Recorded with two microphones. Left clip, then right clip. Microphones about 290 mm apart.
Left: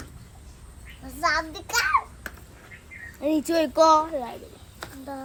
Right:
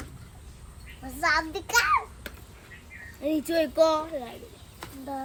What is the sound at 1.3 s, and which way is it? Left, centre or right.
Speech, right.